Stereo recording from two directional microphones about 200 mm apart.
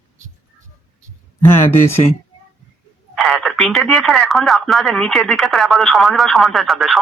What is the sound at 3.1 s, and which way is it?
Speech, centre (ahead or behind).